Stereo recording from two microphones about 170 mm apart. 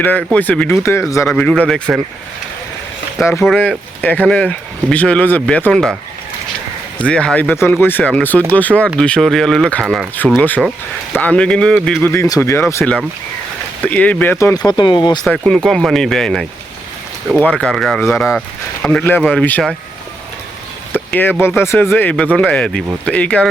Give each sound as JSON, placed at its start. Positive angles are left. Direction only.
{"t": 0.0, "sound": "speech", "side_deg": 10}
{"t": 3.4, "sound": "speech", "side_deg": 0}
{"t": 7.0, "sound": "speech", "side_deg": 5}
{"t": 12.1, "sound": "speech", "side_deg": 15}
{"t": 14.7, "sound": "speech", "side_deg": 25}
{"t": 15.2, "sound": "speech", "side_deg": 5}
{"t": 20.9, "sound": "a sound", "side_deg": 10}
{"t": 21.4, "sound": "speech", "side_deg": 15}